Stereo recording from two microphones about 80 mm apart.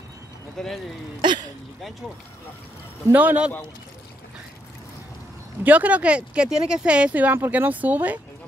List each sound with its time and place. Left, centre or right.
0.6 s speech: centre
1.2 s speech: right
3.1 s speech: right
5.6 s speech: centre